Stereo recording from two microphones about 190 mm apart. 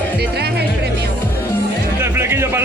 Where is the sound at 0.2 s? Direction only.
55° right (ahead or behind).